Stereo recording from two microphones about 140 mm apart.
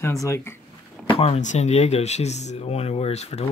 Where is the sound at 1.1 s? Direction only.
45° left (ahead or behind).